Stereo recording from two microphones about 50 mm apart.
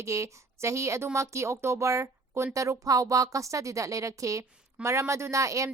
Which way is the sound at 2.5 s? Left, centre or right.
Right.